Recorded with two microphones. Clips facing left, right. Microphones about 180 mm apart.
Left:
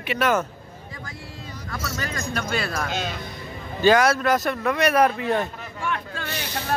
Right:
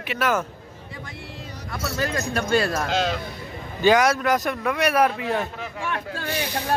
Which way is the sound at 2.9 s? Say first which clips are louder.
Right 6 dB; 80° right.